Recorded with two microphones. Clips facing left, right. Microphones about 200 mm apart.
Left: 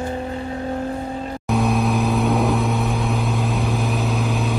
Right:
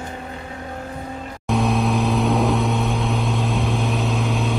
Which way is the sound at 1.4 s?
Centre (ahead or behind).